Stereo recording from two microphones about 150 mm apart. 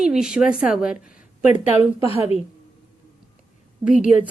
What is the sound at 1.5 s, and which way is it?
Speech, 45° left (ahead or behind).